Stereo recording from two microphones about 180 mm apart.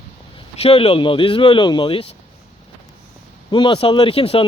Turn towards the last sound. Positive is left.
turn(degrees=30)  # may be behind; listen again after turning